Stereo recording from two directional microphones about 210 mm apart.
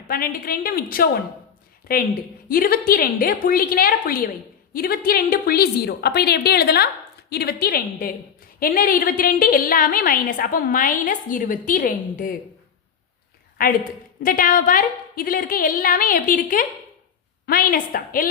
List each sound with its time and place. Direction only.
0.1 s a woman's voice: 45° left (ahead or behind)
13.6 s a woman's voice: 45° left (ahead or behind)